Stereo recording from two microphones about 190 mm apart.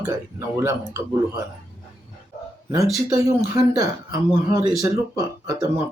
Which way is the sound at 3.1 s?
15° right (ahead or behind).